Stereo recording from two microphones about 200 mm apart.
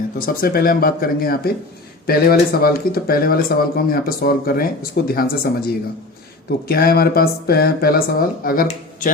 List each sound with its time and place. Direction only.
0.2 s speech: 45° left (ahead or behind)